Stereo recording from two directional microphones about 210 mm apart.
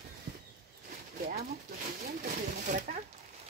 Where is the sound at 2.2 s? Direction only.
40° right (ahead or behind).